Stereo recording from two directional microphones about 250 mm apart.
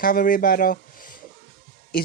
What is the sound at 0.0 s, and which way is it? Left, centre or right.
Speech, left.